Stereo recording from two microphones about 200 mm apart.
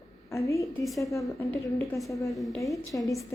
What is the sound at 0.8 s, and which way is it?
Speech, centre (ahead or behind).